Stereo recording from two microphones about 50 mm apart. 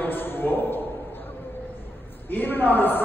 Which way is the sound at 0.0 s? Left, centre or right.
Left.